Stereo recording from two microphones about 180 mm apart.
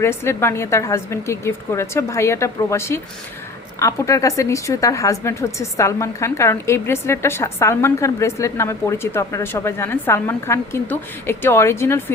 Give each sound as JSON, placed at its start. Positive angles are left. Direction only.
{"t": 0.0, "sound": "speech", "side_deg": 15}